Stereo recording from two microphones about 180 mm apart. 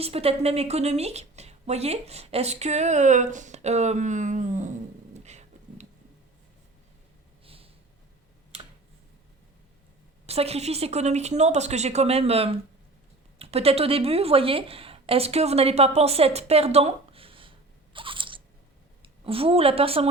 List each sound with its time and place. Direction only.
0.0 s a woman's voice: 35° right (ahead or behind)
5.1 s dog: 40° right (ahead or behind)
7.4 s a sound: 30° right (ahead or behind)
10.2 s a woman's voice: 35° right (ahead or behind)
17.9 s crunch: 30° right (ahead or behind)
19.0 s a woman's voice: 30° right (ahead or behind)